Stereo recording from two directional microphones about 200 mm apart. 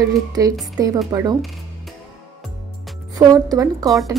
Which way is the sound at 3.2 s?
20° right (ahead or behind).